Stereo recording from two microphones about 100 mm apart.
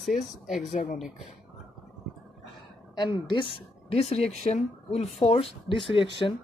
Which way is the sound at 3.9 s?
90° left.